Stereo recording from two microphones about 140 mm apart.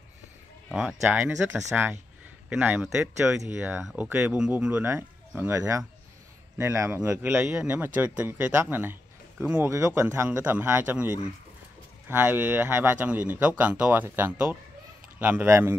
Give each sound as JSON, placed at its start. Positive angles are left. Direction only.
{"t": 0.7, "sound": "a man's voice", "side_deg": -5}